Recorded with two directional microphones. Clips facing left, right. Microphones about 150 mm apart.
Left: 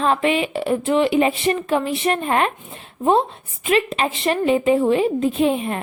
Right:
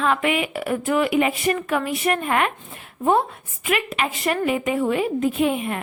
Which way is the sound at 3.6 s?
30° left (ahead or behind).